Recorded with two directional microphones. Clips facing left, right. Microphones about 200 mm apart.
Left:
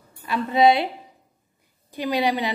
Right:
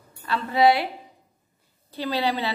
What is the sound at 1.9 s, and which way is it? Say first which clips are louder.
Speech: left 3 dB; 15° left (ahead or behind).